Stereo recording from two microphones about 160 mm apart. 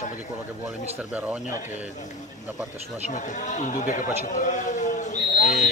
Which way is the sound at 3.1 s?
50° left (ahead or behind).